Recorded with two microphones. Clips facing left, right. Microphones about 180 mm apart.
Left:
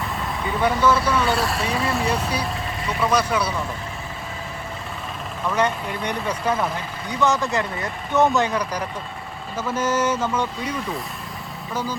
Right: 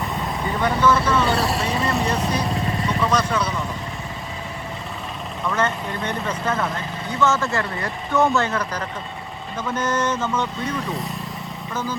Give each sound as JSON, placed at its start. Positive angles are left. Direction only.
{"t": 0.0, "sound": "speech", "side_deg": 5}
{"t": 5.5, "sound": "speech", "side_deg": 15}